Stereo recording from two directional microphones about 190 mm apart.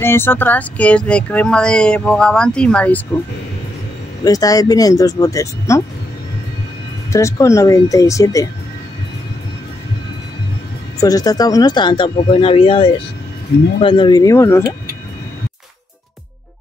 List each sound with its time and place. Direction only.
0.0 s speech: 10° left (ahead or behind)
4.2 s speech: 20° left (ahead or behind)
7.1 s speech: 15° left (ahead or behind)
11.0 s speech: 20° left (ahead or behind)